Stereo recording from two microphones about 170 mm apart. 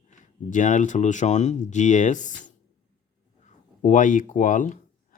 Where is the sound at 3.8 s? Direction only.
50° left (ahead or behind).